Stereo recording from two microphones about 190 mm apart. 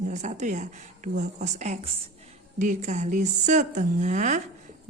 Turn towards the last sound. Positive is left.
turn(degrees=-40)  # may be behind; listen again after turning